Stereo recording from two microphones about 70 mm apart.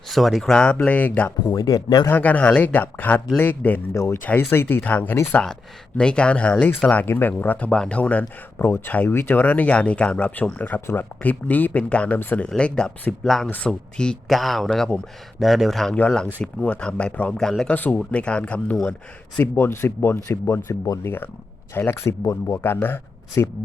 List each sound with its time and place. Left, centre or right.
0.1 s speech: centre
0.9 s speech: left
1.5 s speech: left
2.1 s speech: left
3.9 s speech: left
4.2 s speech: left
8.6 s speech: left
10.8 s speech: left
11.2 s speech: left
12.5 s speech: centre
14.3 s speech: centre
16.0 s speech: centre
19.5 s speech: left